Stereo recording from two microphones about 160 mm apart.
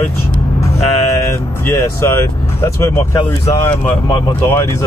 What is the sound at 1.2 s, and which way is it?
Speech, 15° left (ahead or behind).